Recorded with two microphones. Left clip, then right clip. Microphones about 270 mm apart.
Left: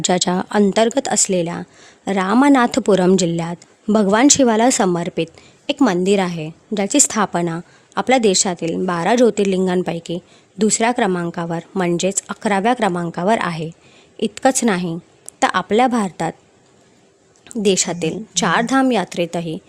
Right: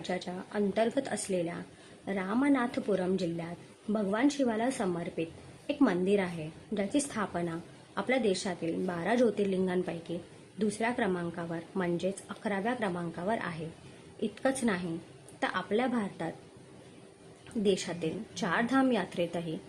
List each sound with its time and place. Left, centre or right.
0.0 s a woman's voice: left
17.6 s a woman's voice: left